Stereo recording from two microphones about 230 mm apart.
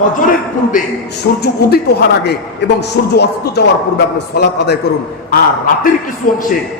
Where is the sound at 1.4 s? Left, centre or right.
Left.